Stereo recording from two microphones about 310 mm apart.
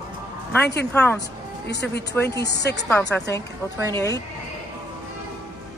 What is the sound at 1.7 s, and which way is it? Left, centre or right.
A woman's voice, left.